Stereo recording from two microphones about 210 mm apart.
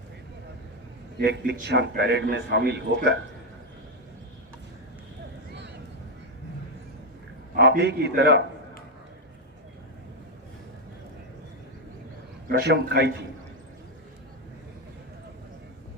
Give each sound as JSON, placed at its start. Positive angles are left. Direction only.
{"t": 1.2, "sound": "a man's voice", "side_deg": -55}
{"t": 7.5, "sound": "a man's voice", "side_deg": -50}
{"t": 12.5, "sound": "a man's voice", "side_deg": -55}